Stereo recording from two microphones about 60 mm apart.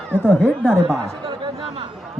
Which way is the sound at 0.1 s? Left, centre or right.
Right.